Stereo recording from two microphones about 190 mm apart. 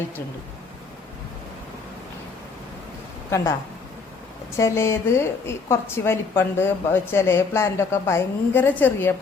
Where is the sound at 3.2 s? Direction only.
15° left (ahead or behind).